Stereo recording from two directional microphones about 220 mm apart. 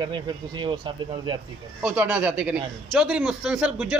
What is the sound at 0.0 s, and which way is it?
Speech, 20° right (ahead or behind).